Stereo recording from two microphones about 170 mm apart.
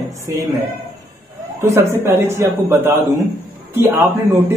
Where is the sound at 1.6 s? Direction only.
15° right (ahead or behind).